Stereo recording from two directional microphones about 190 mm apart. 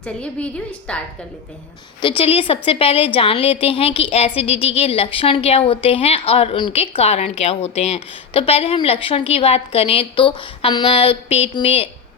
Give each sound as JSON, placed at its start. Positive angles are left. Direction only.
{"t": 0.0, "sound": "a woman's voice", "side_deg": 5}
{"t": 2.0, "sound": "a woman's voice", "side_deg": 30}